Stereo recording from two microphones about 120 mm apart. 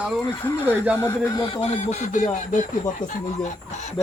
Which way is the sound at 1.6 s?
70° left (ahead or behind).